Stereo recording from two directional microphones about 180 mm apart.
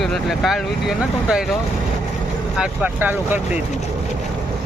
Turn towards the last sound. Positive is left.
turn(degrees=-10)  # may be behind; listen again after turning